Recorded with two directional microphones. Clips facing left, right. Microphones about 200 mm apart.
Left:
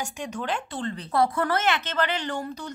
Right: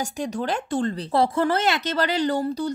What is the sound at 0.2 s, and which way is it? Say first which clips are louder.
Speech: right 4 dB; 40° right (ahead or behind).